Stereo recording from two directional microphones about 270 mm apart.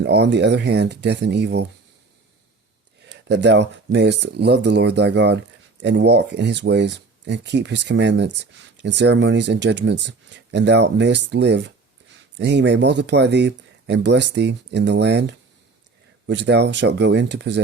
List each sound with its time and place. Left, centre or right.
0.0 s speech: right
3.1 s speech: right